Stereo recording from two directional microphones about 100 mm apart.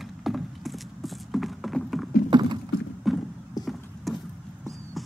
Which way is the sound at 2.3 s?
50° right (ahead or behind).